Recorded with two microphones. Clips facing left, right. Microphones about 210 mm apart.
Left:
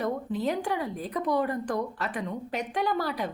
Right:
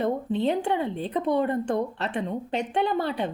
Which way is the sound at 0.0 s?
25° right (ahead or behind).